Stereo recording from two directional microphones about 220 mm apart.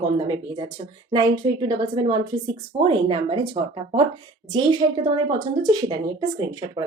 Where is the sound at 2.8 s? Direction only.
25° right (ahead or behind).